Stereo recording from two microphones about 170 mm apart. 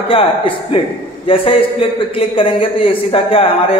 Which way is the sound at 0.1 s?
30° left (ahead or behind).